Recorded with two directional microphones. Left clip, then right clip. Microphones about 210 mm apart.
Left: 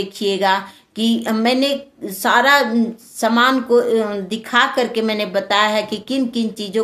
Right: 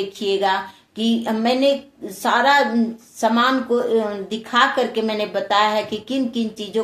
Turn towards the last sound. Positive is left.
turn(degrees=40)  # may be behind; listen again after turning